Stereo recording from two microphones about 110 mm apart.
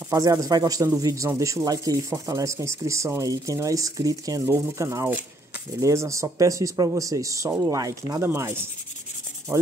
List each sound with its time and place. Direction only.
0.1 s a man's voice: 30° right (ahead or behind)